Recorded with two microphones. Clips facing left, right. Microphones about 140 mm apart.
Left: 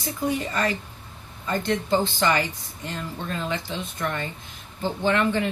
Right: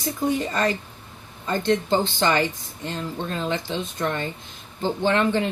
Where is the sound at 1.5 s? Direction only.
25° right (ahead or behind).